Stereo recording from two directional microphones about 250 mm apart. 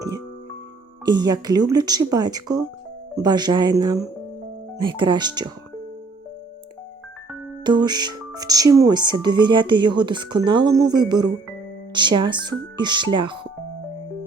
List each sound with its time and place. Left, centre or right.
1.0 s speech: centre
7.6 s speech: centre